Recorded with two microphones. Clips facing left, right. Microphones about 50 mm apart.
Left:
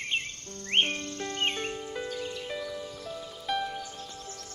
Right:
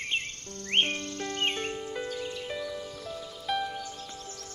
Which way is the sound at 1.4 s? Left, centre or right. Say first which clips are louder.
Even; centre.